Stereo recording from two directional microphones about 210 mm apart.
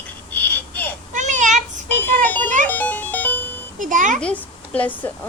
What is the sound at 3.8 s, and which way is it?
Speech, 40° right (ahead or behind).